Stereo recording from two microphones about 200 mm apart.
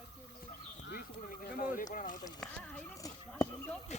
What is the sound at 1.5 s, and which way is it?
Speech, 40° left (ahead or behind).